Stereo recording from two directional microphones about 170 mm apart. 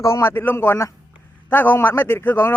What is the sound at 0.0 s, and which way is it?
A man's voice, 15° left (ahead or behind).